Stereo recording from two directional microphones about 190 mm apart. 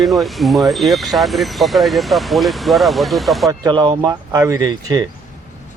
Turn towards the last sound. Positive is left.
turn(degrees=-20)  # may be behind; listen again after turning